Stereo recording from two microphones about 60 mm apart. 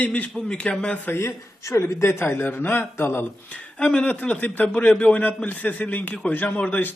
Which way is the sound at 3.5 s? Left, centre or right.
Centre.